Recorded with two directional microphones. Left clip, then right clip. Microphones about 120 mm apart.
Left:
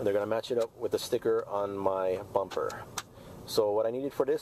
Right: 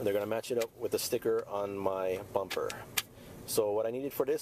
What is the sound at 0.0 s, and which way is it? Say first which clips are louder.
Speech: left 3 dB; 20° right (ahead or behind).